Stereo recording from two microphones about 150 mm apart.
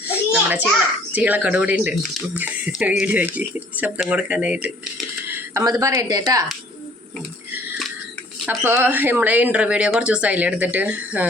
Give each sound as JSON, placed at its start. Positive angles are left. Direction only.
{"t": 0.0, "sound": "a sound", "side_deg": -10}
{"t": 1.1, "sound": "speech", "side_deg": -10}
{"t": 5.6, "sound": "a woman's voice", "side_deg": -20}
{"t": 8.4, "sound": "speech", "side_deg": -15}